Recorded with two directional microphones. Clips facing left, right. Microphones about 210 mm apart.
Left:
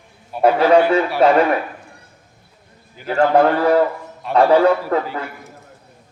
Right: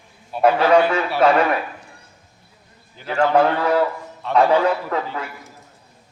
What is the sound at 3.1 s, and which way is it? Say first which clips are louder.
A man's voice: left 3 dB; 40° left (ahead or behind).